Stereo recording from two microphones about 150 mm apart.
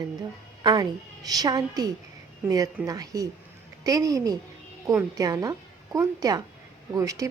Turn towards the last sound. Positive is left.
turn(degrees=-20)  # may be behind; listen again after turning